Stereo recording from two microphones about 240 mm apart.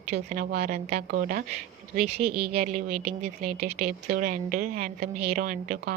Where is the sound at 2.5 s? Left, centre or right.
Right.